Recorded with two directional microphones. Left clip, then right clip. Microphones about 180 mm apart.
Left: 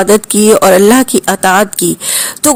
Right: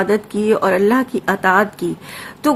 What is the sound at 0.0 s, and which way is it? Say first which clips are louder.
Speech: left 9 dB; 35° left (ahead or behind).